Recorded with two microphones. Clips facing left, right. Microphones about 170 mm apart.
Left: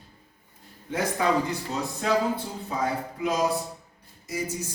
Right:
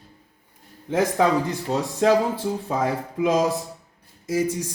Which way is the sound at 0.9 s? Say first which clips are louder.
Right 6 dB; 90° right.